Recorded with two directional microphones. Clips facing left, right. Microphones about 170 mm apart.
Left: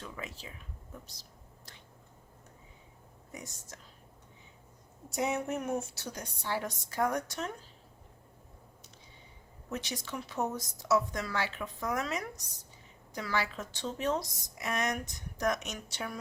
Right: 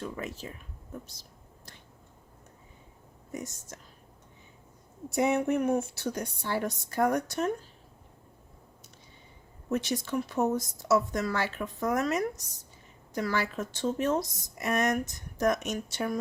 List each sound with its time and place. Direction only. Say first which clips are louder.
0.0 s a woman's voice: right 7 dB; 50° right (ahead or behind)
3.3 s a woman's voice: right 8 dB; 45° right (ahead or behind)
5.1 s a woman's voice: right 7 dB; 55° right (ahead or behind)
9.7 s a woman's voice: right 9 dB; 50° right (ahead or behind)